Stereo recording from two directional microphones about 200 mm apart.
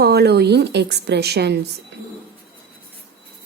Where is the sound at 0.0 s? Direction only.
55° right (ahead or behind).